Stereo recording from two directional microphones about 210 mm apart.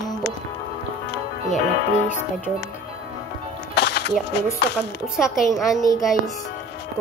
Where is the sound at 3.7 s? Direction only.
55° left (ahead or behind).